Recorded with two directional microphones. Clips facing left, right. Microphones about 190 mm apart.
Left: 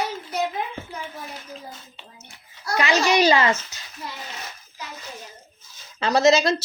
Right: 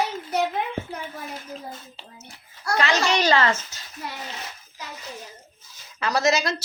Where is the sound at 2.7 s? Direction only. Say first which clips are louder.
Left 3 dB; 10° left (ahead or behind).